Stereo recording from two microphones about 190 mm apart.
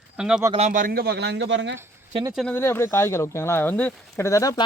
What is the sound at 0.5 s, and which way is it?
Speech, 40° right (ahead or behind).